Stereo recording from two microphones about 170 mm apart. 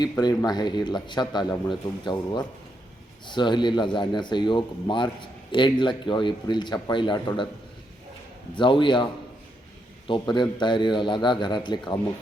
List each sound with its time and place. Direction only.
0.0 s speech: 25° left (ahead or behind)
8.5 s speech: 30° left (ahead or behind)
10.1 s speech: 25° left (ahead or behind)